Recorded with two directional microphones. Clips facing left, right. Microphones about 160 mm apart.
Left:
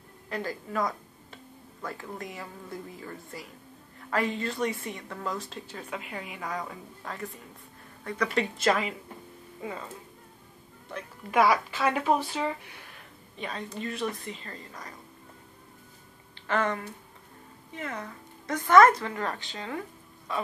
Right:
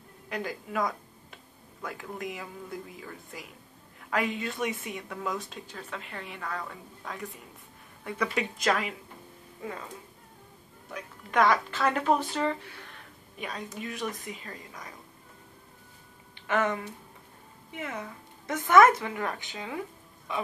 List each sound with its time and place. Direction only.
0.3 s speech: centre (ahead or behind)
8.6 s speech: centre (ahead or behind)
10.9 s speech: 5° left (ahead or behind)
13.4 s speech: 5° right (ahead or behind)
16.4 s a woman's voice: 15° right (ahead or behind)